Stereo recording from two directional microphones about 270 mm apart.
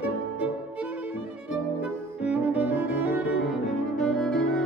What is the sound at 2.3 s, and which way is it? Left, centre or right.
Cello, centre.